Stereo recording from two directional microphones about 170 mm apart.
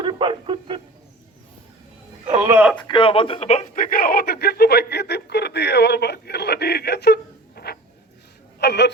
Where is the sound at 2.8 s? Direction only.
30° left (ahead or behind).